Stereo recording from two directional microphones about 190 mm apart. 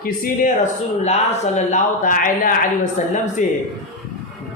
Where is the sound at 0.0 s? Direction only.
45° left (ahead or behind).